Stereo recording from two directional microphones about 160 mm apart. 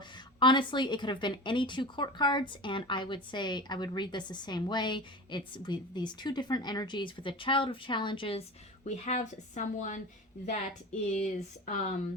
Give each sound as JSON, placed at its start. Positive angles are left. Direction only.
{"t": 0.3, "sound": "a woman's voice", "side_deg": 30}
{"t": 11.2, "sound": "speech", "side_deg": 45}